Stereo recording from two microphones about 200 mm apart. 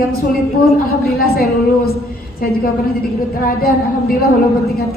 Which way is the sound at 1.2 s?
50° left (ahead or behind).